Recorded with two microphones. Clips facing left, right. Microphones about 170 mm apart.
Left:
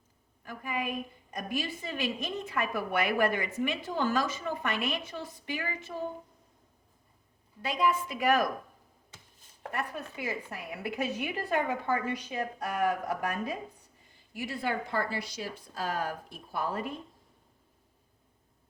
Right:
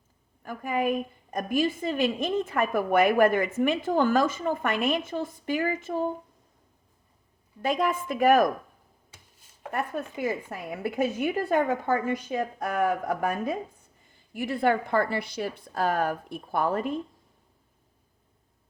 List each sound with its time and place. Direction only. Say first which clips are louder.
0.4 s a woman's voice: right 8 dB; 50° right (ahead or behind)
7.6 s a woman's voice: right 3 dB; 50° right (ahead or behind)
9.7 s a woman's voice: right 6 dB; 50° right (ahead or behind)